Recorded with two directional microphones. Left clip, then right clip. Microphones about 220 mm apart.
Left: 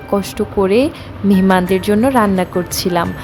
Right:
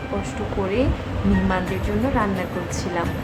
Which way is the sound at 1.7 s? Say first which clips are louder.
Left 10 dB; 45° left (ahead or behind).